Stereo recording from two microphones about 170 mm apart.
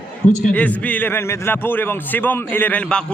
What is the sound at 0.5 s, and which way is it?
A man's voice, 10° left (ahead or behind).